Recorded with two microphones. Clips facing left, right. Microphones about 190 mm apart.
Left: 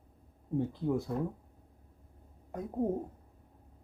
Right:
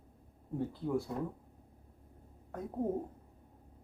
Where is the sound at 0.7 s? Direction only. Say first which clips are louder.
Left 2 dB; 20° left (ahead or behind).